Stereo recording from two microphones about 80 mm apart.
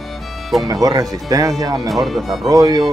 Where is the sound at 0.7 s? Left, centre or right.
Right.